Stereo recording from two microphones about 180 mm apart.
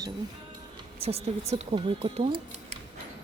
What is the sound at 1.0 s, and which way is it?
A woman's voice, 35° right (ahead or behind).